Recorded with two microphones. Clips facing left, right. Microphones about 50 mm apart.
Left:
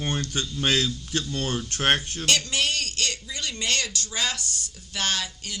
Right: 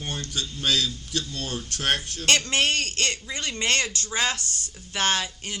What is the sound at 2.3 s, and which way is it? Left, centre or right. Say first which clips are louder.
A man's voice: right 3 dB; right.